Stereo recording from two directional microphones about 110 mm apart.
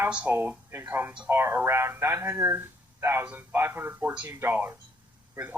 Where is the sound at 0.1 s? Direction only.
10° right (ahead or behind).